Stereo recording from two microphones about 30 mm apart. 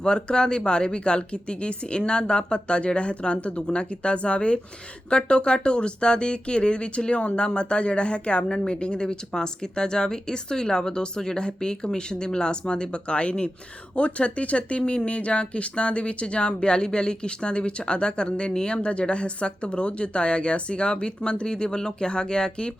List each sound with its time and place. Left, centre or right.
0.0 s speech: left